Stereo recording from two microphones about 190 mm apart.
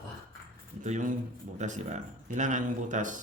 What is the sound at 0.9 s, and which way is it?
A man's voice, 40° right (ahead or behind).